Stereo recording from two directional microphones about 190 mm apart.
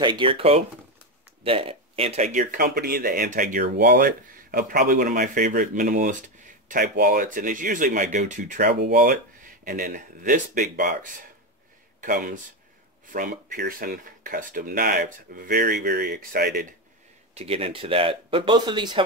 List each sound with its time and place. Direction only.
0.0 s speech: 25° right (ahead or behind); by 16.6 s 50° right (ahead or behind)
17.3 s speech: 30° right (ahead or behind)